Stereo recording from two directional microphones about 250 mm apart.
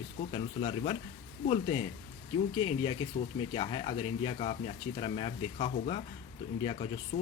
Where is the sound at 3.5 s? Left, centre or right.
Left.